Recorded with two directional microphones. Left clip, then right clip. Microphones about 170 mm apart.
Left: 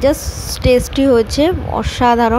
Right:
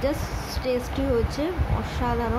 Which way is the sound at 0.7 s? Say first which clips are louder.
Left 14 dB; 50° left (ahead or behind).